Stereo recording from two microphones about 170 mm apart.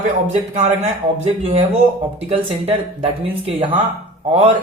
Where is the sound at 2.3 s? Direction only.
35° right (ahead or behind).